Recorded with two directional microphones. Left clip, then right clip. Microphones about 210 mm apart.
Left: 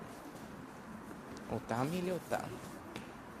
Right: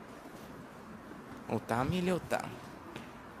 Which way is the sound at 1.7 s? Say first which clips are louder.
Right 4 dB; 25° right (ahead or behind).